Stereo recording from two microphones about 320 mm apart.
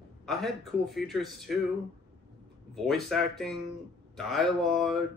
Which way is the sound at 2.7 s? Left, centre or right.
Centre.